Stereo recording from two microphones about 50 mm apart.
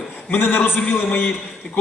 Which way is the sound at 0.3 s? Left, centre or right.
Left.